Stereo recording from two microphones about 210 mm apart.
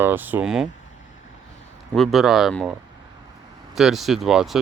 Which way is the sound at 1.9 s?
Centre (ahead or behind).